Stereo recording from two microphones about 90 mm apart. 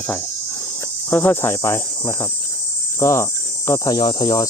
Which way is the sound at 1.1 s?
25° left (ahead or behind).